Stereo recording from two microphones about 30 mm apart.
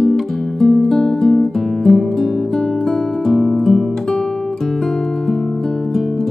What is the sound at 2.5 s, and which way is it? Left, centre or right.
Music, centre.